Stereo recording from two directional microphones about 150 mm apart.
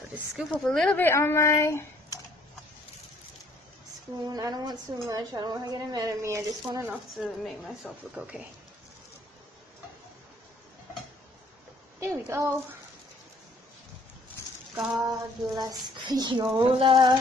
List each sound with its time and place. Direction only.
0.1 s speech: centre (ahead or behind); by 2.1 s 20° left (ahead or behind)
4.3 s speech: 25° right (ahead or behind)
6.9 s a woman's voice: centre (ahead or behind)
12.0 s speech: 20° right (ahead or behind)
15.0 s speech: 25° right (ahead or behind)